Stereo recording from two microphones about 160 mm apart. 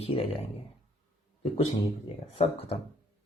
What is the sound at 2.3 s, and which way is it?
Speech, 35° left (ahead or behind).